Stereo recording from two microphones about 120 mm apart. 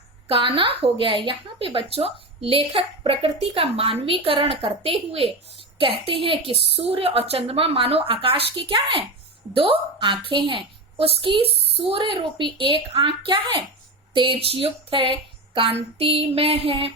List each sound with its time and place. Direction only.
0.3 s a woman's voice: 50° right (ahead or behind)